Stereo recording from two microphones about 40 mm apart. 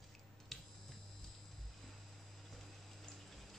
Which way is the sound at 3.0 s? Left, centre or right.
Centre.